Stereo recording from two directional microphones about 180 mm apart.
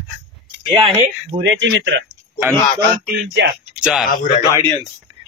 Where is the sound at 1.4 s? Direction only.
90° right.